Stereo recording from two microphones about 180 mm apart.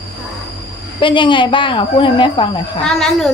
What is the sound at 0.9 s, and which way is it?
Speech, 25° left (ahead or behind).